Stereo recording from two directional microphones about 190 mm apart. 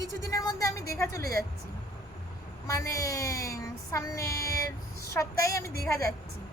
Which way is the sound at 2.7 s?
15° left (ahead or behind).